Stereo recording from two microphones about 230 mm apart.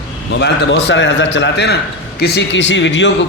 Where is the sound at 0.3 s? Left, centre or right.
Left.